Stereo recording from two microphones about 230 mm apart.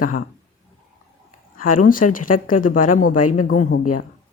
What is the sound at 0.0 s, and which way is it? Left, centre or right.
Speech, left.